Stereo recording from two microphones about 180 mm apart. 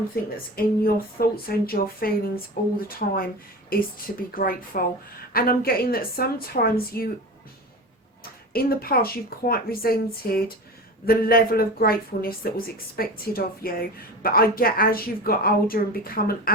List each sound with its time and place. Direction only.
0.1 s a woman's voice: 55° left (ahead or behind)
8.5 s speech: 55° left (ahead or behind)